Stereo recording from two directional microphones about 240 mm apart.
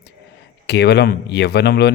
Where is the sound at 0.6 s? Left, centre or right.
Left.